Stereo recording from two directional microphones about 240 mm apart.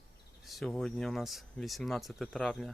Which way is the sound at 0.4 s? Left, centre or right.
Centre.